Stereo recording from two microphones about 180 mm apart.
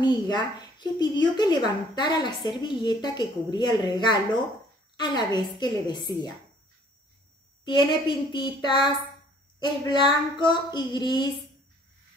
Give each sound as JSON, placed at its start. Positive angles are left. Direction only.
{"t": 0.0, "sound": "a woman's voice", "side_deg": 25}
{"t": 7.6, "sound": "a woman's voice", "side_deg": 25}